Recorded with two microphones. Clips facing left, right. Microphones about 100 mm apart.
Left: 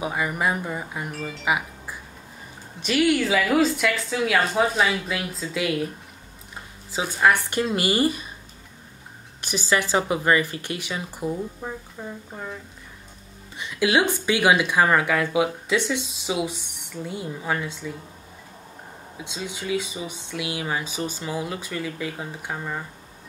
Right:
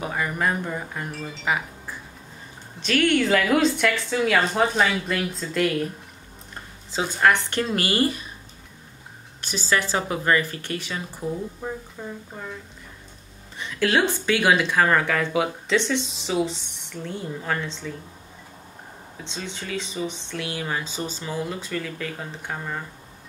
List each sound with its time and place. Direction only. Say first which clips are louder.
0.0 s speech: left 1 dB; 10° left (ahead or behind)
6.9 s speech: even; 5° left (ahead or behind)
9.4 s speech: left 1 dB; 15° left (ahead or behind)
13.6 s speech: left 1 dB; 15° left (ahead or behind)
19.1 s speech: left 1 dB; 10° left (ahead or behind)